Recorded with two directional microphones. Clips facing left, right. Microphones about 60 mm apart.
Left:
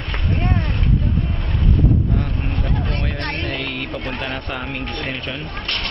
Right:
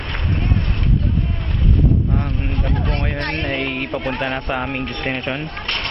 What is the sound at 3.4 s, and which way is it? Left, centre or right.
Speech, right.